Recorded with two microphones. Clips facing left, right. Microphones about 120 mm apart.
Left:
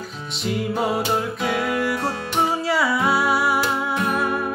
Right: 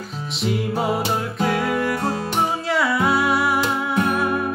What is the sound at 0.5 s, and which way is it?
Music, centre (ahead or behind).